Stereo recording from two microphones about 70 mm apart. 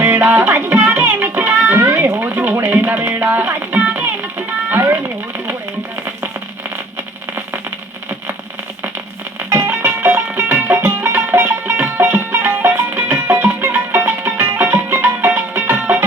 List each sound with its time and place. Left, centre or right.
0.0 s music: right
4.7 s a sound: right
9.5 s music: right
13.3 s music: right